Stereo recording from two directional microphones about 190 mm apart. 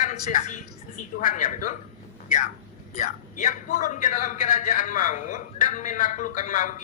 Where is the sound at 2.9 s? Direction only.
40° left (ahead or behind).